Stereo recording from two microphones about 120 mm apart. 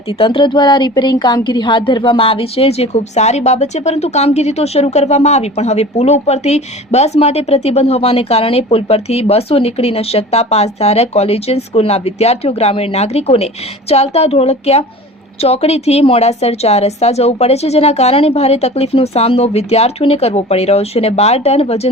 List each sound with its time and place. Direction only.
0.2 s a woman's voice: 45° left (ahead or behind); by 21.8 s 60° left (ahead or behind)